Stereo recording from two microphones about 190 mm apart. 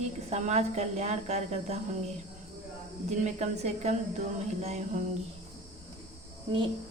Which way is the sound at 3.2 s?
35° right (ahead or behind).